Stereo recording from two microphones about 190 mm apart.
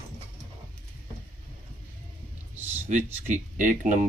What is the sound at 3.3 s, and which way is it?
Speech, 45° right (ahead or behind).